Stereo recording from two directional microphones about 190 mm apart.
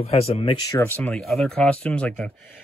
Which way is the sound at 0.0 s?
30° left (ahead or behind).